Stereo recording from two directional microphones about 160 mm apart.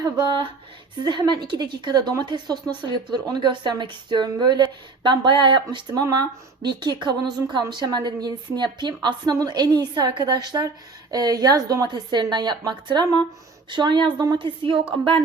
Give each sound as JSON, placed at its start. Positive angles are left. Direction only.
{"t": 0.0, "sound": "speech", "side_deg": -25}